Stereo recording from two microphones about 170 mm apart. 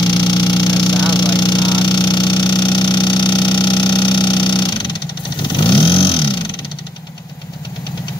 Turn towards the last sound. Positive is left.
turn(degrees=25)  # may be behind; listen again after turning